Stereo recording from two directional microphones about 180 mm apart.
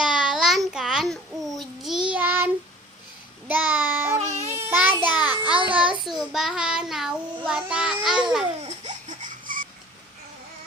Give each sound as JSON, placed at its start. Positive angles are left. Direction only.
{"t": 0.0, "sound": "a sound", "side_deg": -5}
{"t": 2.0, "sound": "child singing", "side_deg": -10}
{"t": 4.2, "sound": "babbling", "side_deg": -40}
{"t": 4.4, "sound": "child singing", "side_deg": -10}
{"t": 5.5, "sound": "child singing", "side_deg": -30}
{"t": 6.1, "sound": "child singing", "side_deg": 0}
{"t": 8.6, "sound": "a sound", "side_deg": -40}